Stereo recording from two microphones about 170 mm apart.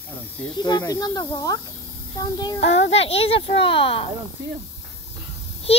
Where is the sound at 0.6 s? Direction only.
20° left (ahead or behind).